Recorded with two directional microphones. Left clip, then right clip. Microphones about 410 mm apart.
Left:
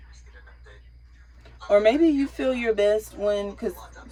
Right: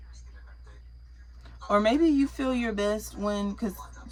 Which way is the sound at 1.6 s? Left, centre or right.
Centre.